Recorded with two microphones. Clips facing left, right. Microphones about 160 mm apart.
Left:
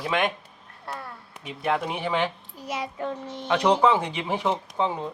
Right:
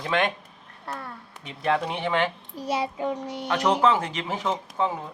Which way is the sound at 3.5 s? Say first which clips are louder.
Left 1 dB; 15° left (ahead or behind).